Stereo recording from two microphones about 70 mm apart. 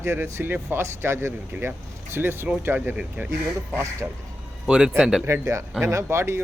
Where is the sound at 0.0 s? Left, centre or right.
Right.